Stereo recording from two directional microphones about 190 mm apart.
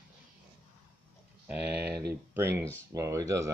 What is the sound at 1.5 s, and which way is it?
Speech, 5° right (ahead or behind).